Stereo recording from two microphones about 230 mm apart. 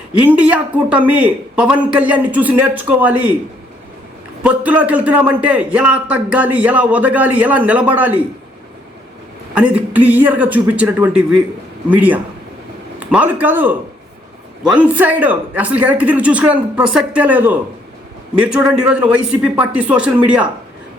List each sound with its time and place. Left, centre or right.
0.1 s speech: centre
4.4 s a man's voice: centre
9.6 s a man's voice: centre